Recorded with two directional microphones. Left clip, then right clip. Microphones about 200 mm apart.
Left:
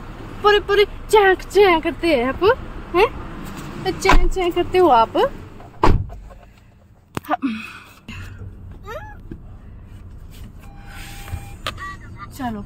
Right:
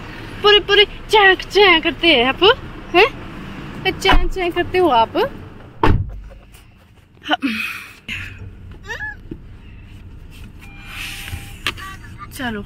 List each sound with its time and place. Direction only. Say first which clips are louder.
0.4 s speech: right 3 dB; centre (ahead or behind)
2.2 s speech: right 4 dB; 15° right (ahead or behind)
4.5 s speech: left 1 dB; 15° right (ahead or behind)
7.2 s a sound: right 4 dB; centre (ahead or behind)
11.7 s vehicle: right 5 dB; 10° left (ahead or behind)
12.4 s speech: right 3 dB; centre (ahead or behind)